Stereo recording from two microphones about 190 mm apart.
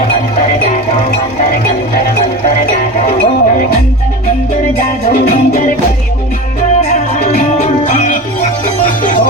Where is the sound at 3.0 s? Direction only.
40° left (ahead or behind).